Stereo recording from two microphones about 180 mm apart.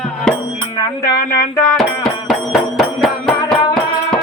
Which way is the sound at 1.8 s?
Centre (ahead or behind).